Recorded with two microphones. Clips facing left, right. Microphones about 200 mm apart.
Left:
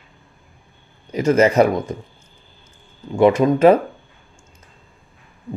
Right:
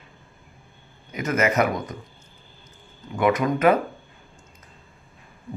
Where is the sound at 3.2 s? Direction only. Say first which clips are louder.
Left 7 dB; 25° left (ahead or behind).